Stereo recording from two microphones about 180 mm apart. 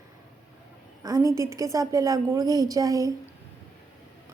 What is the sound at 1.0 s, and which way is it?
A woman's voice, 20° right (ahead or behind).